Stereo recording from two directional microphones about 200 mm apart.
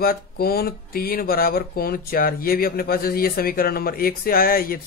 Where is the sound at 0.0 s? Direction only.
50° left (ahead or behind).